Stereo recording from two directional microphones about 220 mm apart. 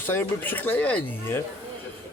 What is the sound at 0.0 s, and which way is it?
Speech, 10° left (ahead or behind).